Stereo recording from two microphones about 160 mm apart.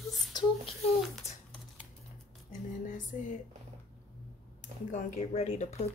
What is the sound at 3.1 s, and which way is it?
Speech, 50° left (ahead or behind).